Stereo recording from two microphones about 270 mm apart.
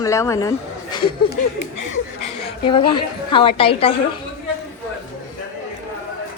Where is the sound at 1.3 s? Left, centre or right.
Left.